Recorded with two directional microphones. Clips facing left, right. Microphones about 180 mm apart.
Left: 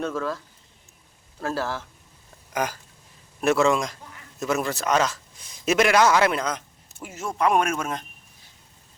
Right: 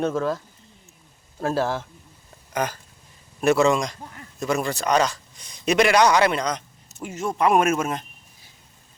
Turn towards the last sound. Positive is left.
turn(degrees=-5)  # may be behind; listen again after turning